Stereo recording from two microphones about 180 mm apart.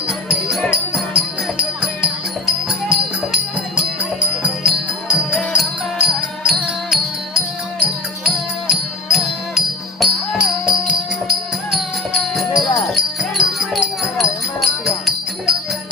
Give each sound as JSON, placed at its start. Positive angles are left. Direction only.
{"t": 0.1, "sound": "music", "side_deg": -5}